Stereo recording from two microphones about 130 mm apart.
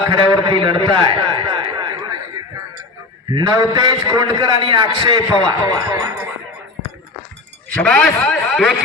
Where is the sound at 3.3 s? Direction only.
35° right (ahead or behind).